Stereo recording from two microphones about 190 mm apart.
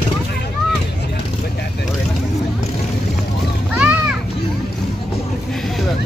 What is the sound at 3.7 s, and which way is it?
Children playing, 5° right (ahead or behind).